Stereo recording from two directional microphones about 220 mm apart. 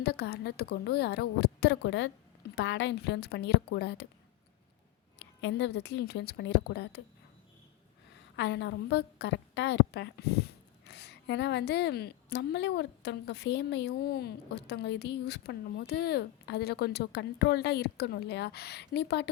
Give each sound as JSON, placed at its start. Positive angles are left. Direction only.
{"t": 0.0, "sound": "a woman's voice", "side_deg": 50}
{"t": 5.2, "sound": "a woman's voice", "side_deg": 50}
{"t": 8.4, "sound": "a woman's voice", "side_deg": 50}